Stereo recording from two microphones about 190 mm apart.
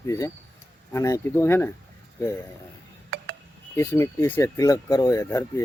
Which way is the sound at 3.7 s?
15° left (ahead or behind).